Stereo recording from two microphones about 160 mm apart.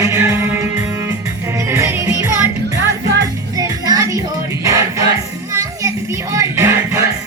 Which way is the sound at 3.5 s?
25° right (ahead or behind).